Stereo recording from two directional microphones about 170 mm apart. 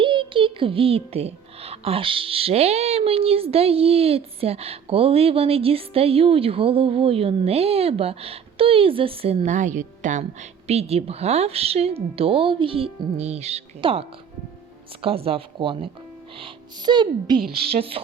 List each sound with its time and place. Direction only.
0.0 s a child's voice: 30° right (ahead or behind)